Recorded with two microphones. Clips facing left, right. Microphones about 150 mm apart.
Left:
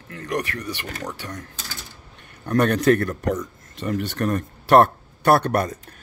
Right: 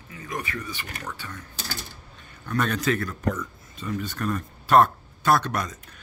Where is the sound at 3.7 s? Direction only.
75° left (ahead or behind).